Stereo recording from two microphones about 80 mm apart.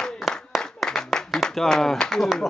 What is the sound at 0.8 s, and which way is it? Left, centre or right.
Clapping, centre.